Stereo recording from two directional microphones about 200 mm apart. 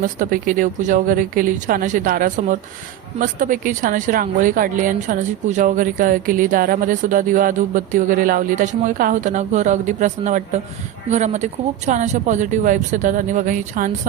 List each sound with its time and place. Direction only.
0.0 s speech: 40° right (ahead or behind)